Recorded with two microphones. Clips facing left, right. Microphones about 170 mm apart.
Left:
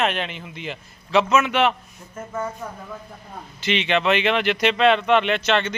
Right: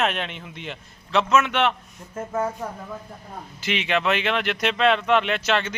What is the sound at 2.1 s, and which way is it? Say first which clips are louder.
Speech: right 3 dB; 40° right (ahead or behind).